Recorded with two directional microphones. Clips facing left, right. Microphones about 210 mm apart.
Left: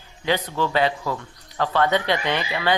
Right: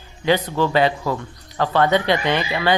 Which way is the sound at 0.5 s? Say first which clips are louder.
Right 4 dB; 40° right (ahead or behind).